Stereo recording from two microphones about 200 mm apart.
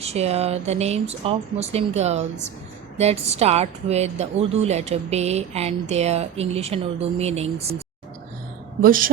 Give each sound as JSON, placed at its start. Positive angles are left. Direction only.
{"t": 0.0, "sound": "a woman's voice", "side_deg": -30}
{"t": 8.8, "sound": "a woman's voice", "side_deg": -45}